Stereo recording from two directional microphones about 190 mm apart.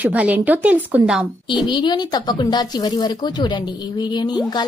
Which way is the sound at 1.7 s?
25° left (ahead or behind).